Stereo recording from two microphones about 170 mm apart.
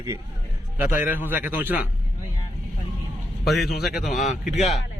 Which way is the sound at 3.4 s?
Centre (ahead or behind).